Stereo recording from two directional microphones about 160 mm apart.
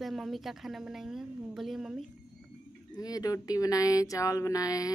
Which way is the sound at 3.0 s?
25° left (ahead or behind).